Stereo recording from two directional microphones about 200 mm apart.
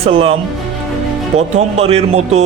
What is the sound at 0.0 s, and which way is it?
Speech, 30° right (ahead or behind).